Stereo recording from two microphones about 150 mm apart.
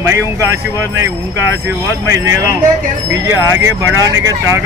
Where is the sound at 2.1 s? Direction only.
20° right (ahead or behind).